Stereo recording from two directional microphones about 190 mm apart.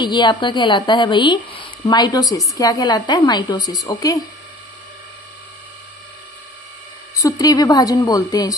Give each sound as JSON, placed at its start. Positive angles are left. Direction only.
{"t": 0.0, "sound": "a woman's voice", "side_deg": 25}
{"t": 7.2, "sound": "a woman's voice", "side_deg": 20}